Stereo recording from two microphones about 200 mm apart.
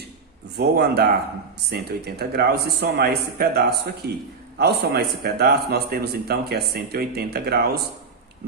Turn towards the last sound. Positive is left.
turn(degrees=-50)  # may be behind; listen again after turning